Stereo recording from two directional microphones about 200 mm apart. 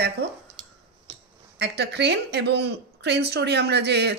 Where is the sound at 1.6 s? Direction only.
55° right (ahead or behind).